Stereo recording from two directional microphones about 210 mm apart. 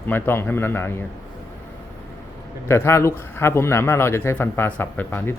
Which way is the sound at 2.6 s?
10° left (ahead or behind).